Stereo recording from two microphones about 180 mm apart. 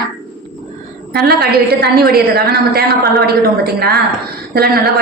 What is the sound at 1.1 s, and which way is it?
A woman's voice, 60° right (ahead or behind).